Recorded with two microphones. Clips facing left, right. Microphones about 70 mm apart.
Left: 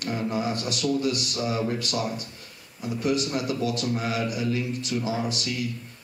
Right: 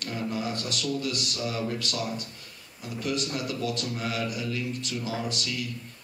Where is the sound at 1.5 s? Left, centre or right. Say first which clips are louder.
Left 5 dB; centre.